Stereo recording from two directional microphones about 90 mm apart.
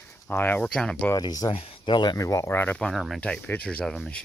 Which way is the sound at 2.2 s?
35° left (ahead or behind).